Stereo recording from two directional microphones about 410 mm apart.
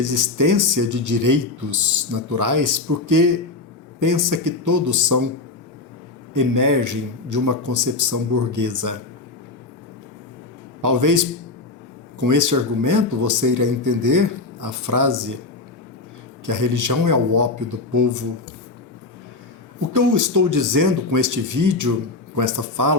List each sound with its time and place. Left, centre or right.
0.0 s speech: right
6.3 s speech: right
10.8 s speech: right
12.2 s speech: right
16.5 s speech: right
19.9 s speech: right